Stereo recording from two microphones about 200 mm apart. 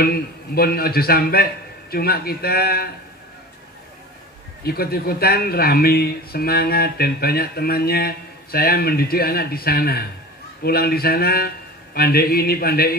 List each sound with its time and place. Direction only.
0.0 s a man's voice: 50° left (ahead or behind)
4.6 s a man's voice: 50° left (ahead or behind)